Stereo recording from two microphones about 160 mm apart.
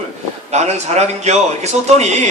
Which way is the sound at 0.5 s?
45° right (ahead or behind).